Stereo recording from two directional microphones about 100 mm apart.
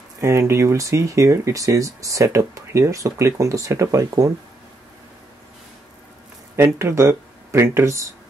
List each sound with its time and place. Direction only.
0.2 s speech: 25° right (ahead or behind)
6.5 s speech: 25° right (ahead or behind)